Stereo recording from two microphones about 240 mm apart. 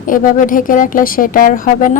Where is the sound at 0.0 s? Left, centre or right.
Left.